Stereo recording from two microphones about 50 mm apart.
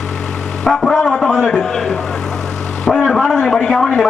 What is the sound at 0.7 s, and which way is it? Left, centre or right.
Speech, centre.